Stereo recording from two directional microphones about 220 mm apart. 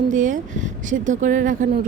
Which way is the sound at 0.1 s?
35° right (ahead or behind).